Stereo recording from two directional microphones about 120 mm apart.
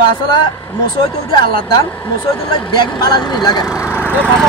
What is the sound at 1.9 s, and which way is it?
Speech, 15° left (ahead or behind).